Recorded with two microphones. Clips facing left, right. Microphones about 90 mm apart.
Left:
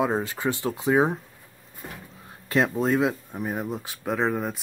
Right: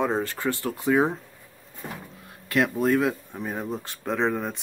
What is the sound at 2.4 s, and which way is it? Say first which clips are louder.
Speech: even; 25° left (ahead or behind).